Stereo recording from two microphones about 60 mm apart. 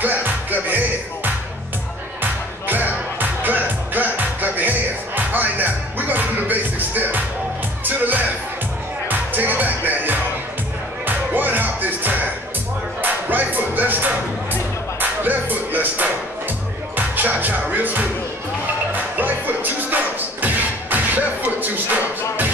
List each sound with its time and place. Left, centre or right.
0.0 s music: right
2.6 s music: right